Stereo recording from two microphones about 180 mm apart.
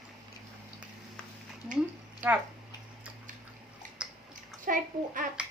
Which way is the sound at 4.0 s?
5° right (ahead or behind).